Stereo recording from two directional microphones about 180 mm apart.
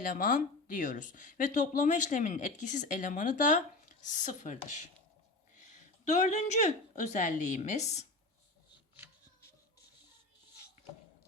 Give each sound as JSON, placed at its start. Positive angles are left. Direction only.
{"t": 0.0, "sound": "speech", "side_deg": 50}